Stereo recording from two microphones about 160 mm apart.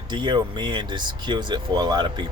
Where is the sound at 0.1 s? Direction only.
30° right (ahead or behind).